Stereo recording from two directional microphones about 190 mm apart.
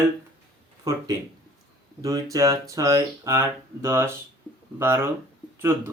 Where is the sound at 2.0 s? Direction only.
20° right (ahead or behind).